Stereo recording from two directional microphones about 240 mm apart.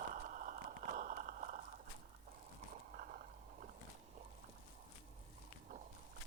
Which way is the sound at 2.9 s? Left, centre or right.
Right.